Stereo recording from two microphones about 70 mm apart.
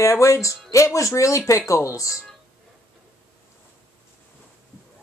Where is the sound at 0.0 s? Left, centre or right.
Left.